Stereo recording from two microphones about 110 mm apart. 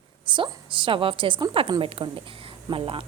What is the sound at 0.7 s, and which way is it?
A woman's voice, 50° right (ahead or behind).